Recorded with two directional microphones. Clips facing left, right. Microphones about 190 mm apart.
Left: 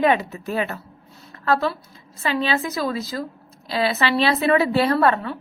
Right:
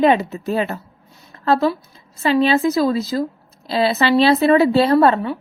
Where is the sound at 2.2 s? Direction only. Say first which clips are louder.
Right 7 dB; 30° right (ahead or behind).